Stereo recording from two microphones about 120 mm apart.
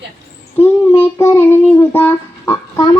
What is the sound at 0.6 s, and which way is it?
Child singing, 15° left (ahead or behind).